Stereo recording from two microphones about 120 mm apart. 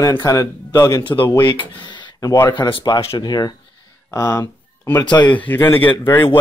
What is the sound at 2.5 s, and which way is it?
Speech, 45° left (ahead or behind).